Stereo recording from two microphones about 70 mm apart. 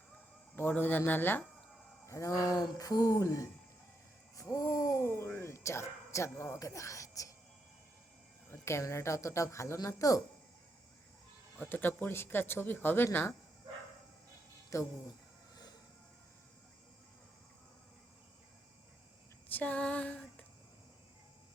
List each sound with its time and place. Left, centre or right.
0.5 s speech: left
2.0 s speech: left
8.4 s a woman's voice: left
11.5 s speech: left
14.7 s a woman's voice: left
19.5 s female singing: left